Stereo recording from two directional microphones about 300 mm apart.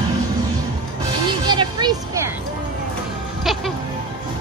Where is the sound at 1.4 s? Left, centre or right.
Centre.